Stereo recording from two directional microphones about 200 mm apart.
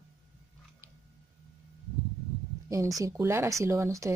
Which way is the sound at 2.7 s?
15° right (ahead or behind).